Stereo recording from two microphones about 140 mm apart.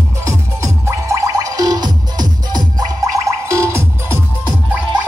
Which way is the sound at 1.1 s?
25° right (ahead or behind).